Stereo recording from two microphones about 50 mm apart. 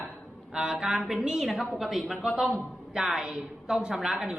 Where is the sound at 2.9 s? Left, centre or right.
Centre.